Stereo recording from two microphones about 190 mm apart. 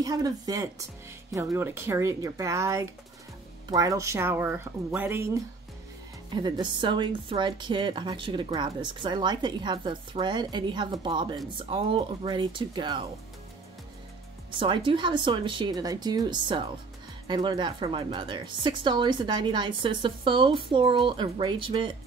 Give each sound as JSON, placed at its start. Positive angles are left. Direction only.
{"t": 0.0, "sound": "speech", "side_deg": -20}
{"t": 6.3, "sound": "a woman's voice", "side_deg": -25}
{"t": 14.6, "sound": "a woman's voice", "side_deg": -25}